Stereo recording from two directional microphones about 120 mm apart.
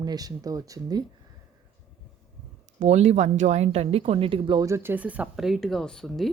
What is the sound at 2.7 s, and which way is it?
Speech, 70° right (ahead or behind).